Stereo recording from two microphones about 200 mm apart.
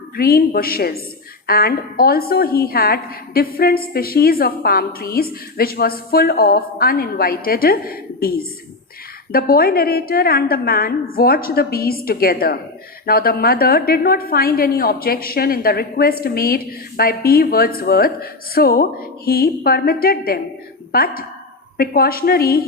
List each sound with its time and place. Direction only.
0.2 s a woman's voice: 50° left (ahead or behind)